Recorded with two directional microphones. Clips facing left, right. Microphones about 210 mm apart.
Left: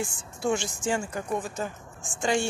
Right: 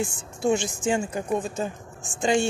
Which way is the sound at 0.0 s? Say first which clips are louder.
Right 4 dB; 20° right (ahead or behind).